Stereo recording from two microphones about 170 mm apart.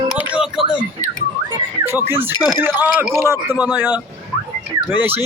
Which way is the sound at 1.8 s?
15° right (ahead or behind).